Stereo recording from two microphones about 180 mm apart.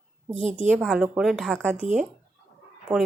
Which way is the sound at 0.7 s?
5° right (ahead or behind).